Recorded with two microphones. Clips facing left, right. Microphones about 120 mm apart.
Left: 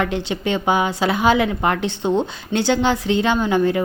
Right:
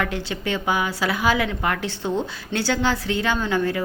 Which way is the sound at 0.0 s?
20° left (ahead or behind).